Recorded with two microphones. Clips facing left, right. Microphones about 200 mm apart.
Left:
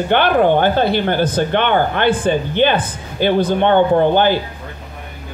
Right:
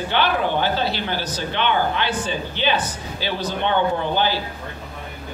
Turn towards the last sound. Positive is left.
turn(degrees=55)  # may be behind; listen again after turning